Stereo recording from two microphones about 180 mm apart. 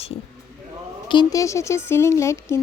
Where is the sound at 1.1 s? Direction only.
20° left (ahead or behind).